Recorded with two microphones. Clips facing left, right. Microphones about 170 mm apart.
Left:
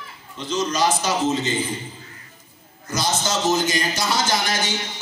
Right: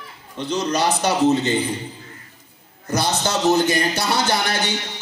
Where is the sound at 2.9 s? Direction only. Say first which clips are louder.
Right 2 dB; 60° right (ahead or behind).